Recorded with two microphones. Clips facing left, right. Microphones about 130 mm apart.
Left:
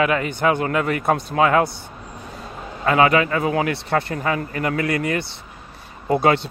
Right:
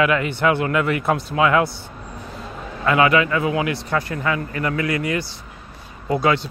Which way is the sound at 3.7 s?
60° left (ahead or behind).